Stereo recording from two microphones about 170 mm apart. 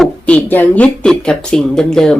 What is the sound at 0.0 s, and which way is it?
Speech, 5° left (ahead or behind).